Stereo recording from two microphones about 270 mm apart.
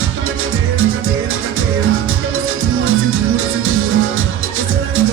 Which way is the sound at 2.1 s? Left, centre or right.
Right.